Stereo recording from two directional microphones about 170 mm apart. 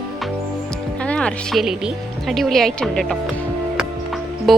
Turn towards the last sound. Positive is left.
turn(degrees=0)  # may be behind; listen again after turning